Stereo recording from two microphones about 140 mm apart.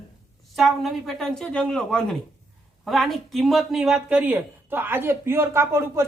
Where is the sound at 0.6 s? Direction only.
Centre (ahead or behind).